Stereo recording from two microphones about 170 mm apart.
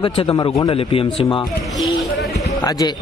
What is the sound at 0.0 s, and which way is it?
A man's voice, 30° left (ahead or behind).